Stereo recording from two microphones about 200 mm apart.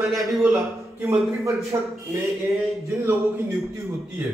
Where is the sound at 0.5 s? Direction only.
15° right (ahead or behind).